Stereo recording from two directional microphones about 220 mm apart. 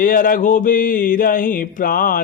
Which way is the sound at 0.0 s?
40° left (ahead or behind).